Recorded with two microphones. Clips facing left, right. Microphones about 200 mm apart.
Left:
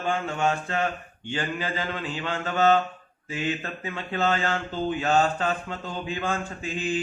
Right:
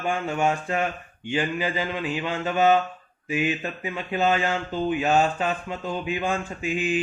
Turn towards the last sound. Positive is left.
turn(degrees=-15)  # may be behind; listen again after turning